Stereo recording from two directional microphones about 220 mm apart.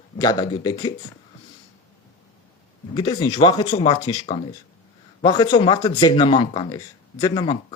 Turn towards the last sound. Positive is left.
turn(degrees=25)  # may be behind; listen again after turning